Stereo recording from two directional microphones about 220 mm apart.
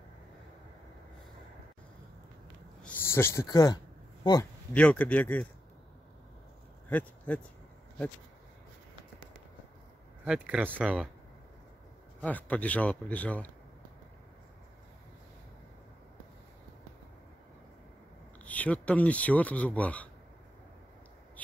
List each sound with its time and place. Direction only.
2.8 s a sound: 10° left (ahead or behind)
4.7 s speech: 5° left (ahead or behind)
6.9 s speech: 5° left (ahead or behind)
10.2 s speech: 5° right (ahead or behind)
12.2 s speech: 5° left (ahead or behind)
18.4 s speech: 5° left (ahead or behind)